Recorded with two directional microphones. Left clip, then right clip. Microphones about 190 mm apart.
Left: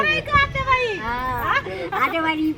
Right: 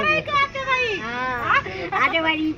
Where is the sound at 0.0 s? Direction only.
10° left (ahead or behind).